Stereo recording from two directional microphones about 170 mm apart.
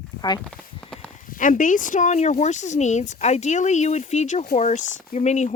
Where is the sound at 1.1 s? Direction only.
50° left (ahead or behind).